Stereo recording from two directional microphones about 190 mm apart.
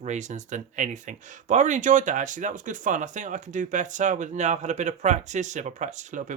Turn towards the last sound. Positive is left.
turn(degrees=-40)  # may be behind; listen again after turning